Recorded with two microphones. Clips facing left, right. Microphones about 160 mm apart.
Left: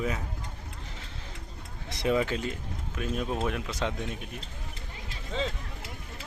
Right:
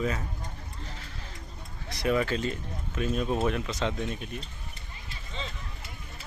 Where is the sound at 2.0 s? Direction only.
20° left (ahead or behind).